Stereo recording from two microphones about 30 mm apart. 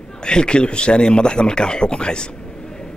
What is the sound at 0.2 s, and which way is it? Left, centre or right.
Speech, left.